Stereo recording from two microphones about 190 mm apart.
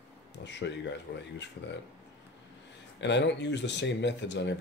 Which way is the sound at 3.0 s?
70° left (ahead or behind).